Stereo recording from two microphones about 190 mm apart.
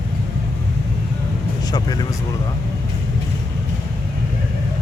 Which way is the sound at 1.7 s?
20° left (ahead or behind).